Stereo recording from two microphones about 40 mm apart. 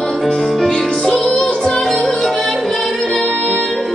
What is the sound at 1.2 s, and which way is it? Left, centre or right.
Music, left.